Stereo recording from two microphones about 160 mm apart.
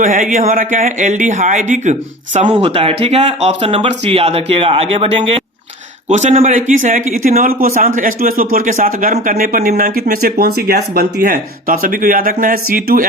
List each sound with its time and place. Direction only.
0.0 s a man's voice: 55° right (ahead or behind)
2.4 s a man's voice: 35° right (ahead or behind); by 13.1 s 65° right (ahead or behind)